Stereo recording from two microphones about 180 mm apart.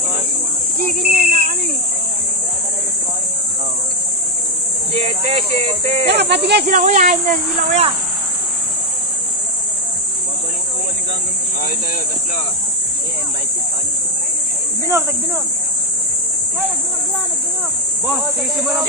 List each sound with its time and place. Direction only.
0.7 s speech: 55° right (ahead or behind)
5.0 s speech: 35° right (ahead or behind)
6.0 s speech: 70° right (ahead or behind)
6.7 s speech: 45° right (ahead or behind)
18.0 s speech: centre (ahead or behind)